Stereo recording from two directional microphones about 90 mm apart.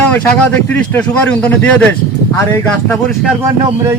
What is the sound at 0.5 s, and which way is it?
Speech, 20° left (ahead or behind).